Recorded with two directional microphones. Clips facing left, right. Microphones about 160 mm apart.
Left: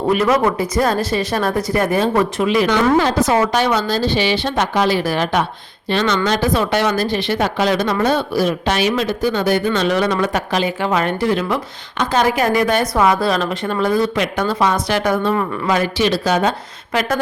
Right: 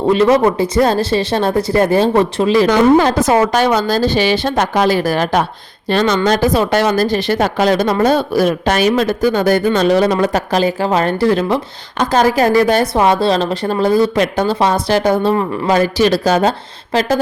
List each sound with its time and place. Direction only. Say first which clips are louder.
0.1 s a woman's voice: right 5 dB; 25° right (ahead or behind)